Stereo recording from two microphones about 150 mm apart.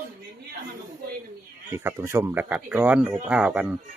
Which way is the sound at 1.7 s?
15° right (ahead or behind).